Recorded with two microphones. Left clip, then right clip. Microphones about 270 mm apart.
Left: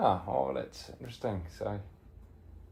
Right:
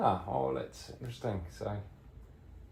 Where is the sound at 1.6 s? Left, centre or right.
Left.